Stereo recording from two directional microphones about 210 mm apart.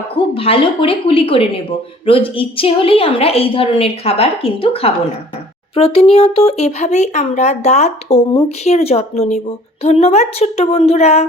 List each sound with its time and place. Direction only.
0.3 s a woman's voice: 25° left (ahead or behind)